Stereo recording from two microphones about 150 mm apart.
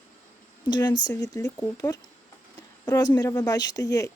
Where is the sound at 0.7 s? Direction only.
30° left (ahead or behind).